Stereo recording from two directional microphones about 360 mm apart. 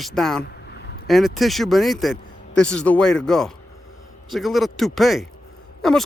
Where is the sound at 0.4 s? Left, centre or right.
Left.